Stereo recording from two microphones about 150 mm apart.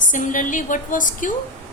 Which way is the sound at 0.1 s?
60° left (ahead or behind).